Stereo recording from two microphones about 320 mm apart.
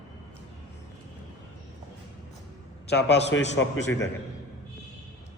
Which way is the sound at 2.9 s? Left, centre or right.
Left.